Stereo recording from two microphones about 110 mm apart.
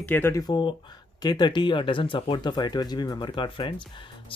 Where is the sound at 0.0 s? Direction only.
15° left (ahead or behind).